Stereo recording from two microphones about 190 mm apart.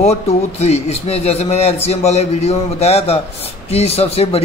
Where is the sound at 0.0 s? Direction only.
35° left (ahead or behind).